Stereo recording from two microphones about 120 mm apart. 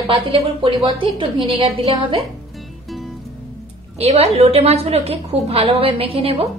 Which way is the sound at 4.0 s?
60° right (ahead or behind).